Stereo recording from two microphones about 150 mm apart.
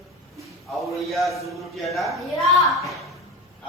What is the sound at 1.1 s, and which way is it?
Speech, centre (ahead or behind).